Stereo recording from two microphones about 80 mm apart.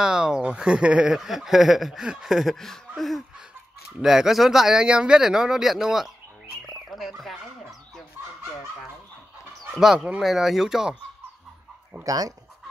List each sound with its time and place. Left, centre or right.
0.0 s speech: centre
2.5 s speech: centre
3.0 s laughter: centre
4.0 s speech: centre
9.8 s speech: centre
12.0 s speech: right